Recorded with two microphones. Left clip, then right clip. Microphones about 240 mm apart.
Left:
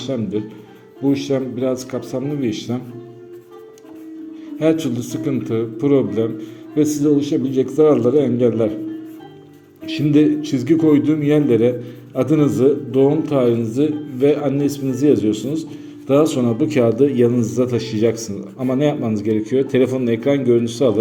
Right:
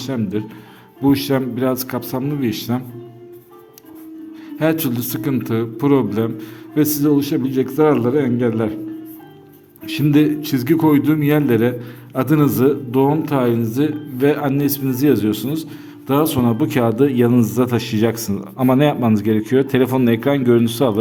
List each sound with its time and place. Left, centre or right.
0.0 s a man's voice: right
4.6 s a man's voice: right
9.8 s a man's voice: right